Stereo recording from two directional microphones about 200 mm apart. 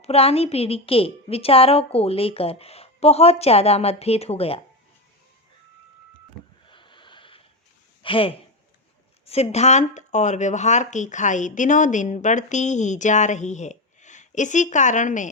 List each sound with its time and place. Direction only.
0.0 s speech: 30° left (ahead or behind)
6.7 s wheeze: 25° left (ahead or behind)
8.0 s speech: 25° left (ahead or behind)